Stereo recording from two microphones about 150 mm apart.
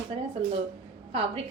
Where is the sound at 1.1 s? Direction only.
40° right (ahead or behind).